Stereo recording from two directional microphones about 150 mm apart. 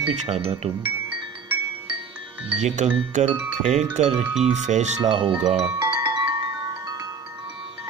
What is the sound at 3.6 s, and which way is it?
Speech, 45° right (ahead or behind).